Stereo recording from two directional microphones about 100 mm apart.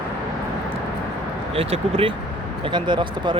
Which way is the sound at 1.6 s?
75° right (ahead or behind).